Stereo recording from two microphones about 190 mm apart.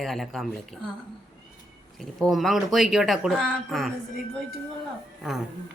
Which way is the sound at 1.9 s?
Centre (ahead or behind).